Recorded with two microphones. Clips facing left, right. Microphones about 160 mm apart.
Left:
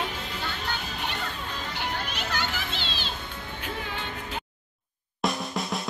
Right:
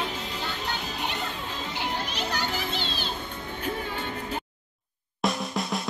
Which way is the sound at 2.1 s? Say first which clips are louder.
Right 2 dB; 40° right (ahead or behind).